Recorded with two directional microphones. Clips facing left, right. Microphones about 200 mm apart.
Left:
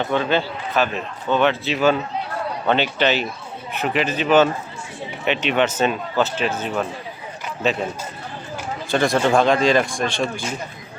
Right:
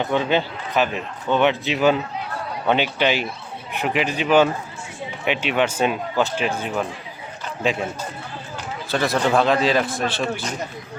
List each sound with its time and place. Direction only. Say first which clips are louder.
0.0 s a man's voice: even; 15° right (ahead or behind)
8.9 s speech: left 2 dB; 5° right (ahead or behind)